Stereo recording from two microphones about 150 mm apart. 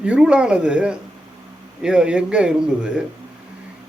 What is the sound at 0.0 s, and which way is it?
A man's voice, 5° right (ahead or behind).